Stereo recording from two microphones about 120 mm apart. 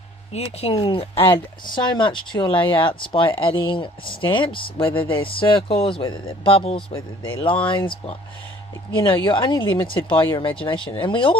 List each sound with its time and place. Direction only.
0.3 s speech: 55° left (ahead or behind)
9.2 s speech: 40° left (ahead or behind)